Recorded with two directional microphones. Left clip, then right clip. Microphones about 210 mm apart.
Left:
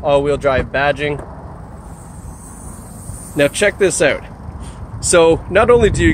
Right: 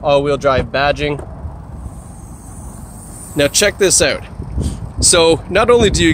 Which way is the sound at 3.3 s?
20° right (ahead or behind).